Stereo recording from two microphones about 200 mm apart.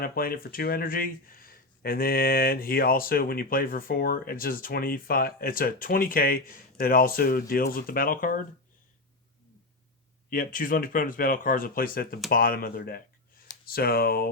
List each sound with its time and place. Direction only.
0.0 s speech: 50° left (ahead or behind)
10.2 s speech: 45° left (ahead or behind)